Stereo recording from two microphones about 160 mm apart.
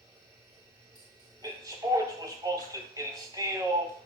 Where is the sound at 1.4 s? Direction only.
20° right (ahead or behind).